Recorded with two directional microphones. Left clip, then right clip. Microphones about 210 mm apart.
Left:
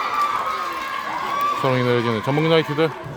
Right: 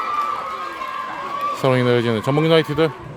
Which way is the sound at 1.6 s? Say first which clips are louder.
Right 2 dB; 20° right (ahead or behind).